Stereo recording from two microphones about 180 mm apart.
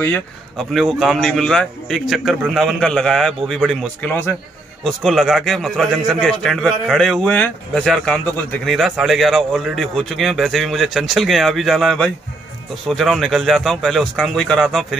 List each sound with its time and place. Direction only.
0.6 s speech: centre (ahead or behind)